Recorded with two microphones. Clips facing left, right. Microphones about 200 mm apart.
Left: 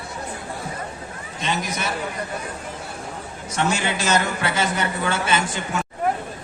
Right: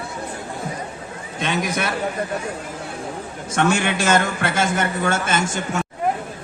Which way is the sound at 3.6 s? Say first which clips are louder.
Right 4 dB; 55° right (ahead or behind).